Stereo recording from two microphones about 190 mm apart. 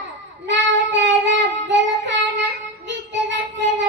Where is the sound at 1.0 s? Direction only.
70° right (ahead or behind).